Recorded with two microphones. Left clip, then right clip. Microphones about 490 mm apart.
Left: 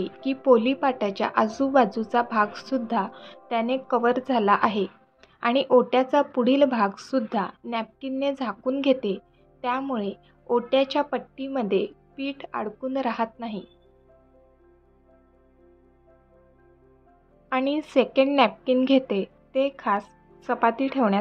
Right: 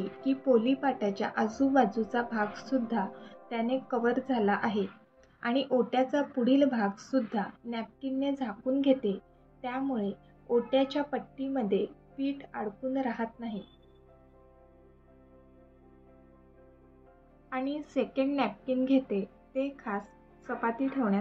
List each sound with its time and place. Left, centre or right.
0.0 s a woman's voice: left
17.5 s a woman's voice: left